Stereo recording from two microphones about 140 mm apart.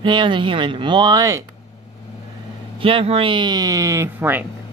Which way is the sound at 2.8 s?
40° right (ahead or behind).